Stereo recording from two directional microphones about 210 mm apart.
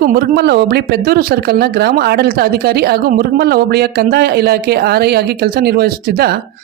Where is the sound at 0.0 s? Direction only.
50° right (ahead or behind).